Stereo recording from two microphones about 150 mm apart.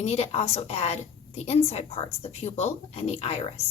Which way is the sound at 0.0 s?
45° left (ahead or behind).